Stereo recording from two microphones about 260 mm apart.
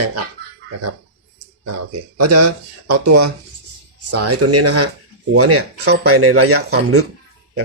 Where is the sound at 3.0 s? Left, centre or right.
Right.